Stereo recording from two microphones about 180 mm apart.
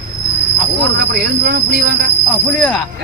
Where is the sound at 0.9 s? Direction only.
60° right (ahead or behind).